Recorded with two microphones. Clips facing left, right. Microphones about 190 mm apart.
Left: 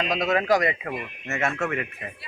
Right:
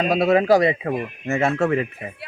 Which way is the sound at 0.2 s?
30° right (ahead or behind).